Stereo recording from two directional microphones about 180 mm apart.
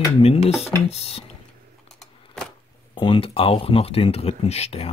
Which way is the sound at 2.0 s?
Centre (ahead or behind).